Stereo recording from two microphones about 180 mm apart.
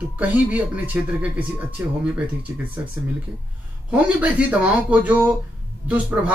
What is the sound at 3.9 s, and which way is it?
Speech, 5° right (ahead or behind).